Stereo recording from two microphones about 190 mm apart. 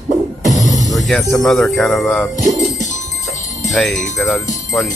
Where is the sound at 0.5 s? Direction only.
20° left (ahead or behind).